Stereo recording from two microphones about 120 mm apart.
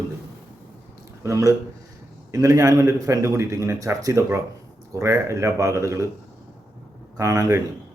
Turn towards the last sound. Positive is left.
turn(degrees=-30)  # may be behind; listen again after turning